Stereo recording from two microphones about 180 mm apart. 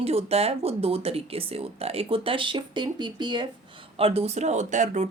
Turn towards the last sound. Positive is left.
turn(degrees=-40)  # may be behind; listen again after turning